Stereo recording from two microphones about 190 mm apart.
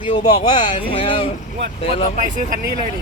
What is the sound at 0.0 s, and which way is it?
Speech, 25° left (ahead or behind).